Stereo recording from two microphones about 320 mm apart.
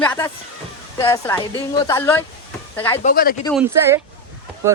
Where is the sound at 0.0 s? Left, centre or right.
Centre.